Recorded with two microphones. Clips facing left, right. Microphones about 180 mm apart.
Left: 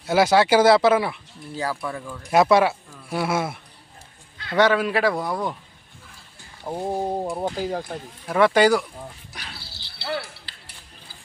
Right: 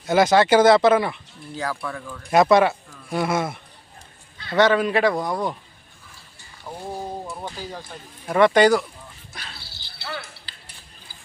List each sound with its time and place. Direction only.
0.0 s speech: 5° left (ahead or behind)
6.8 s speech: 25° left (ahead or behind)
7.3 s speech: 45° left (ahead or behind)
8.3 s speech: 5° left (ahead or behind)
9.3 s bird: 10° left (ahead or behind)
10.0 s a sound: 35° left (ahead or behind)